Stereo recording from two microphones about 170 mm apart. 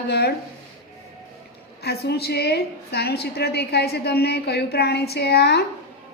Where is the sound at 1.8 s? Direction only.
75° left (ahead or behind).